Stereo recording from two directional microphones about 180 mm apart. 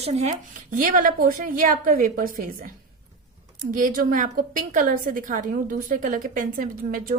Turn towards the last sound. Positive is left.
turn(degrees=-50)  # may be behind; listen again after turning